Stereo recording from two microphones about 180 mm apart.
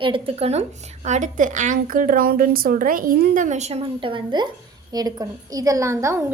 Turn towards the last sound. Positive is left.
turn(degrees=-15)  # may be behind; listen again after turning